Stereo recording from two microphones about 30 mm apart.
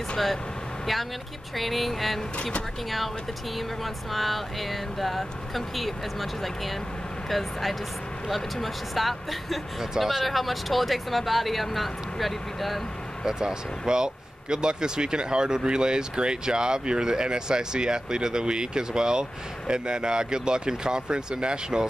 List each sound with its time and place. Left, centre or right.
1.6 s speech: centre
3.5 s speech: centre
8.9 s speech: centre
9.8 s speech: centre
10.2 s speech: centre
13.2 s speech: right